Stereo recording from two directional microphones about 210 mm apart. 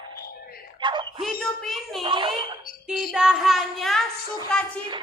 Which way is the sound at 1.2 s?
Centre (ahead or behind).